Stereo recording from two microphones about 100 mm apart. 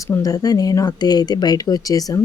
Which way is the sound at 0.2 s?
40° left (ahead or behind).